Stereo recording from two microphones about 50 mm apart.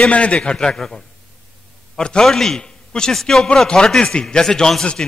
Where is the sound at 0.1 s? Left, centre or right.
Left.